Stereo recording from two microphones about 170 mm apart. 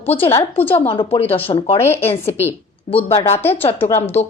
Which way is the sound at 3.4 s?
10° left (ahead or behind).